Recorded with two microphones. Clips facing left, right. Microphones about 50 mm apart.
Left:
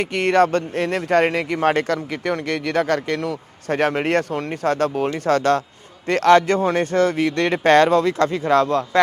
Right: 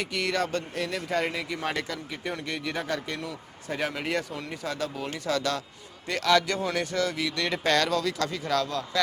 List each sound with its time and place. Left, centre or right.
0.0 s a man's voice: left
1.9 s a man's voice: left